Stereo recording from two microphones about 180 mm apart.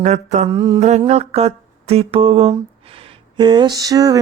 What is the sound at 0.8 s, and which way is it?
Mantra, 40° right (ahead or behind).